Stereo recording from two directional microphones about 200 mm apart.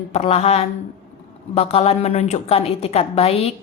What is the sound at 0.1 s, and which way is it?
A woman's voice, 30° left (ahead or behind).